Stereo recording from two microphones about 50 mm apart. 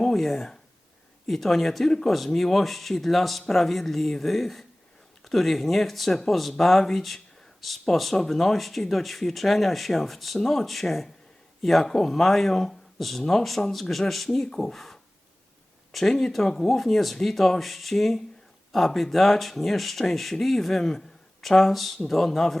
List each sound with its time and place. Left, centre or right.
0.0 s speech: centre